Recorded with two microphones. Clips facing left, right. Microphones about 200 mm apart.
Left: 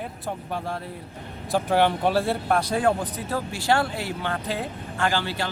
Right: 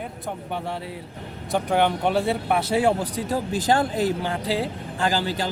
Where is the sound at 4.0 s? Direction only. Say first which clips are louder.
Right 6 dB; 40° right (ahead or behind).